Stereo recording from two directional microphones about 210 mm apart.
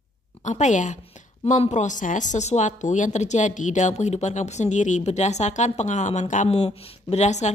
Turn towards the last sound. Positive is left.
turn(degrees=35)  # may be behind; listen again after turning